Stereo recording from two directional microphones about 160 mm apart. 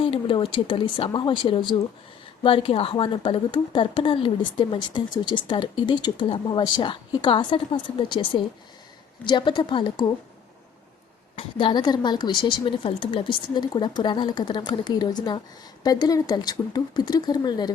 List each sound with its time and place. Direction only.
0.0 s a woman's voice: 35° left (ahead or behind)
11.3 s a woman's voice: 30° left (ahead or behind)